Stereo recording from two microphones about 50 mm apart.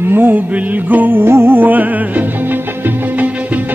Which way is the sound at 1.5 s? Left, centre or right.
Right.